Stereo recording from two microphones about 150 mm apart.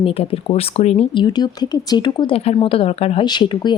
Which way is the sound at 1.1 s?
30° left (ahead or behind).